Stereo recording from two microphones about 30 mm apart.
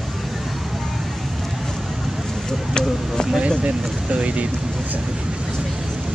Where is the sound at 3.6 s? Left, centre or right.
Right.